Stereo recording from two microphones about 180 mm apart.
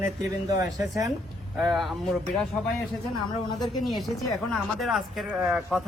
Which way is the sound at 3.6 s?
Centre (ahead or behind).